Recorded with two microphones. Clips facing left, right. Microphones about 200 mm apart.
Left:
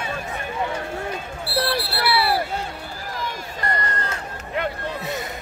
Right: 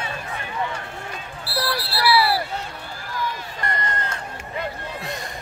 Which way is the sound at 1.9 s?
55° left (ahead or behind).